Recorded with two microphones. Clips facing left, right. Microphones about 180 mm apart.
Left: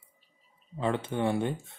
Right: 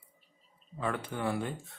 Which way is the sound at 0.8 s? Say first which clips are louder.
Left 5 dB; 25° left (ahead or behind).